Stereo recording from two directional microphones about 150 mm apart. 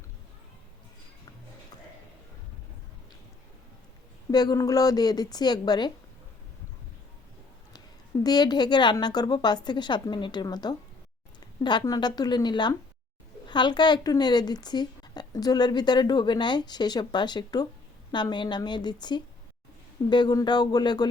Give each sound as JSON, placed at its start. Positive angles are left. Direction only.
{"t": 4.3, "sound": "a woman's voice", "side_deg": 25}
{"t": 8.2, "sound": "a woman's voice", "side_deg": 25}